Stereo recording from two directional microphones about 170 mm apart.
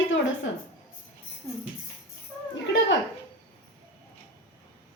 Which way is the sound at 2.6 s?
90° left.